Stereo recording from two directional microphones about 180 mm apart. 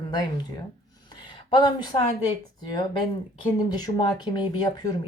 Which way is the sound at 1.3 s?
25° left (ahead or behind).